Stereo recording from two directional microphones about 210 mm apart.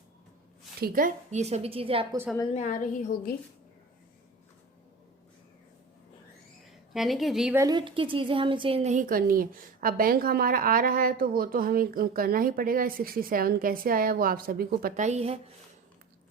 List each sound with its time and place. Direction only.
0.8 s a woman's voice: 40° right (ahead or behind); by 2.0 s 25° right (ahead or behind)
2.5 s a woman's voice: 35° left (ahead or behind)
6.9 s a woman's voice: centre (ahead or behind)
7.6 s a woman's voice: 20° right (ahead or behind)